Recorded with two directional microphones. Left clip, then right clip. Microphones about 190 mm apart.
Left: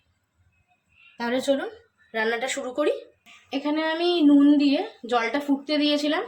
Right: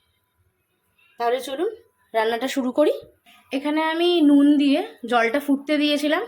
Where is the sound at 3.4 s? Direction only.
35° right (ahead or behind).